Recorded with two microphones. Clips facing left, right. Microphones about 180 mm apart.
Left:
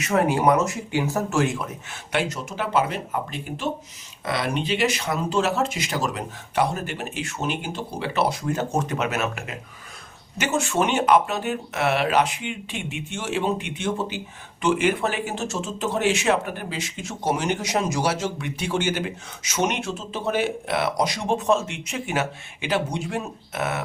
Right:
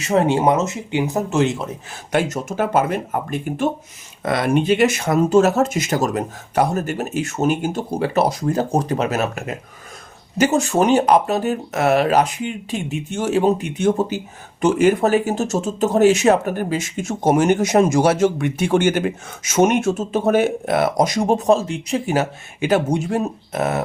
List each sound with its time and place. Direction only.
0.0 s speech: 25° right (ahead or behind)
2.1 s speech: 45° right (ahead or behind)